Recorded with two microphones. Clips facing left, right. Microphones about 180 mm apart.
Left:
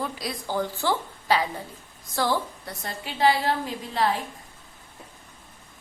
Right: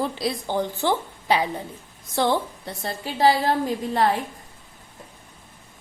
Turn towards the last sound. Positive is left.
turn(degrees=-45)  # may be behind; listen again after turning